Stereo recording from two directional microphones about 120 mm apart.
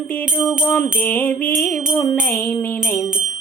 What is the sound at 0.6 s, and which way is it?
Music, 15° left (ahead or behind).